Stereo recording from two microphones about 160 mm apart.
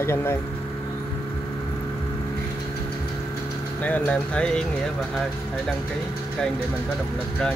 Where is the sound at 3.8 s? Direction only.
10° left (ahead or behind).